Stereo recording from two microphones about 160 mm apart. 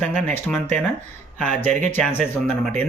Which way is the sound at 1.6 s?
50° right (ahead or behind).